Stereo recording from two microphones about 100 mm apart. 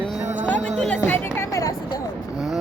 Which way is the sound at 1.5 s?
35° left (ahead or behind).